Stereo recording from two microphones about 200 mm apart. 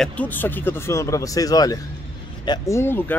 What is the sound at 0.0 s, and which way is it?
Speech, 5° left (ahead or behind).